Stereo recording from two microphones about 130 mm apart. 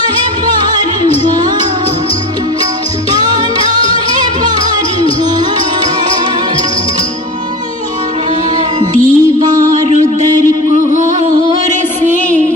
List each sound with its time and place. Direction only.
3.5 s music: 45° left (ahead or behind)
9.0 s music: 90° right
11.1 s music: 85° right
12.0 s music: 75° right (ahead or behind)